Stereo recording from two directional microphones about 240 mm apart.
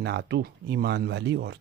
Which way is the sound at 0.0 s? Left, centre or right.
Right.